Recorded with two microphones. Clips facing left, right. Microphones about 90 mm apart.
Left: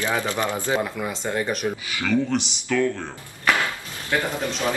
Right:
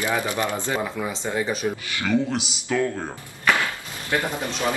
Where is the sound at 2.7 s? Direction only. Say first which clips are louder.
Left 1 dB; 15° right (ahead or behind).